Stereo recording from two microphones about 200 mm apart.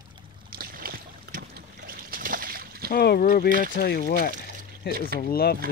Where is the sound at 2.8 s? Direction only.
50° left (ahead or behind).